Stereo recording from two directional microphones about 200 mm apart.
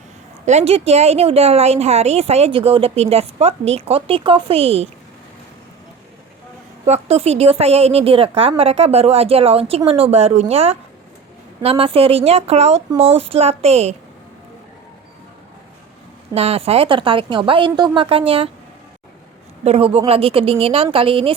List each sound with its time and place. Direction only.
0.4 s a woman's voice: 30° right (ahead or behind)
6.8 s a woman's voice: 30° right (ahead or behind)
16.3 s a woman's voice: 30° right (ahead or behind)
19.6 s a woman's voice: 30° right (ahead or behind)